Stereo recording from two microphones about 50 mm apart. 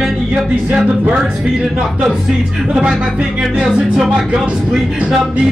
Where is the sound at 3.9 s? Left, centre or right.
Centre.